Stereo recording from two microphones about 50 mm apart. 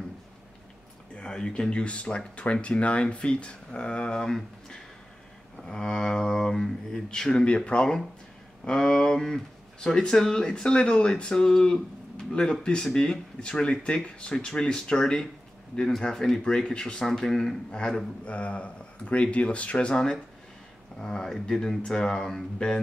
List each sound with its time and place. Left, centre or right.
1.1 s speech: centre
19.9 s speech: centre